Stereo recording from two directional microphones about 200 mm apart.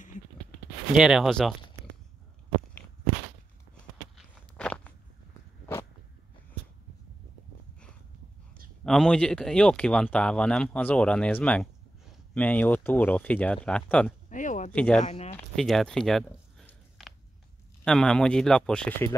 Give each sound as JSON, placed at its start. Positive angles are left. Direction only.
{"t": 0.9, "sound": "speech", "side_deg": -5}
{"t": 4.2, "sound": "walk", "side_deg": 5}
{"t": 8.8, "sound": "speech", "side_deg": 5}
{"t": 14.3, "sound": "a sound", "side_deg": 40}
{"t": 14.7, "sound": "speech", "side_deg": 5}
{"t": 15.0, "sound": "speech", "side_deg": 30}
{"t": 15.3, "sound": "a sound", "side_deg": 0}
{"t": 17.8, "sound": "speech", "side_deg": 5}